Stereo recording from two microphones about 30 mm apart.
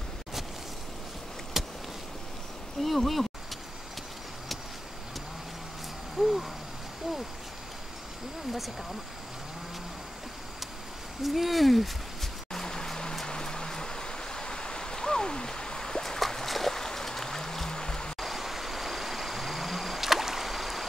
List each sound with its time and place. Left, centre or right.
1.6 s vehicle: centre
2.8 s speech: centre
6.1 s a sound: centre
11.2 s speech: centre
12.5 s music: centre
13.2 s a sound: left
16.2 s music: centre
18.2 s vehicle: centre